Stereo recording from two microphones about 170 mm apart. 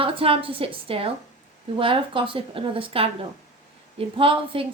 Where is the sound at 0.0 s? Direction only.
35° right (ahead or behind).